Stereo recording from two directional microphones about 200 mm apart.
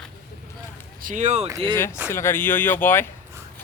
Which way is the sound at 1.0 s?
40° right (ahead or behind).